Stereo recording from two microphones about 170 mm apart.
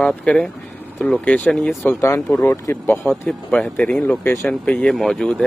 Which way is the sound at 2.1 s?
5° left (ahead or behind).